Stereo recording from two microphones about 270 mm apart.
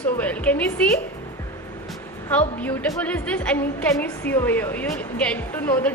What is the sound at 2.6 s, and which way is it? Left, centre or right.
A woman's voice, centre.